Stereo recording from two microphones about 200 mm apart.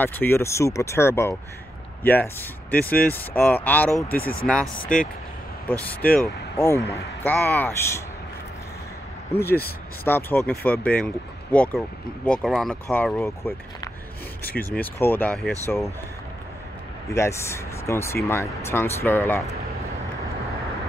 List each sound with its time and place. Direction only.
0.0 s speech: 10° left (ahead or behind)
4.2 s speech: 45° left (ahead or behind)
4.9 s speech: 5° left (ahead or behind)
10.0 s speech: 10° left (ahead or behind)
14.8 s speech: 10° left (ahead or behind)
17.1 s speech: 15° left (ahead or behind)